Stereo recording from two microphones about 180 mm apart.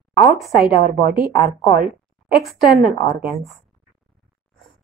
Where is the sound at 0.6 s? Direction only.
55° right (ahead or behind).